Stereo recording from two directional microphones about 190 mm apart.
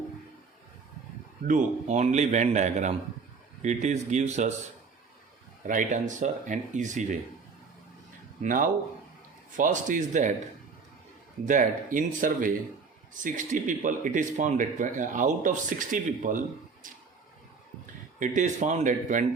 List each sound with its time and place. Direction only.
1.5 s speech: 40° right (ahead or behind)
5.6 s speech: 45° right (ahead or behind)
8.4 s speech: 45° right (ahead or behind)
11.4 s speech: 45° right (ahead or behind)
18.2 s speech: 40° right (ahead or behind)